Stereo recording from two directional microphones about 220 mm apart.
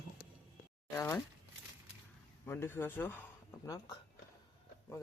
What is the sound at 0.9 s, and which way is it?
Speech, 15° left (ahead or behind).